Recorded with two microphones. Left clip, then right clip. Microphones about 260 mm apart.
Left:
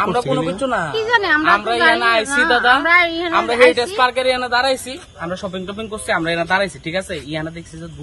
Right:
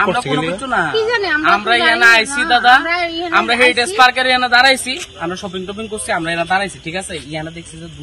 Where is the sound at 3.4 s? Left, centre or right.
Left.